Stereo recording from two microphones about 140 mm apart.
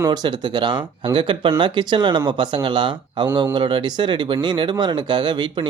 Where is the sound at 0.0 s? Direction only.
30° right (ahead or behind).